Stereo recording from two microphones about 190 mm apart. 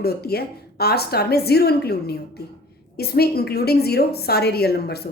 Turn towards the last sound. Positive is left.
turn(degrees=55)  # may be behind; listen again after turning